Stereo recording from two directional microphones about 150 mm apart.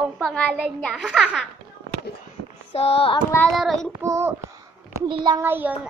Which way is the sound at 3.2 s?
10° left (ahead or behind).